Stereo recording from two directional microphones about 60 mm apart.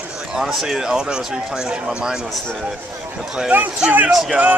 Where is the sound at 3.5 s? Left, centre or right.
Right.